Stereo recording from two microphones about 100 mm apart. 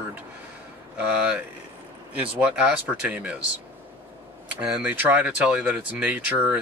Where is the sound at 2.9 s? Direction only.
15° right (ahead or behind).